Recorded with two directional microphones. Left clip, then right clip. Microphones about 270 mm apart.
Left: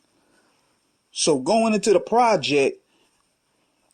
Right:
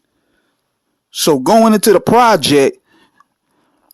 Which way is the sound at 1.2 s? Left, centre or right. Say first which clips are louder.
Right 9 dB; right.